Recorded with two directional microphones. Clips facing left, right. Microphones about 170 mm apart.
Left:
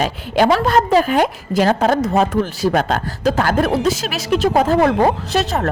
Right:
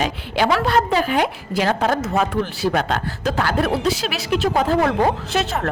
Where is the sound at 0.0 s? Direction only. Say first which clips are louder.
Left 4 dB; 40° left (ahead or behind).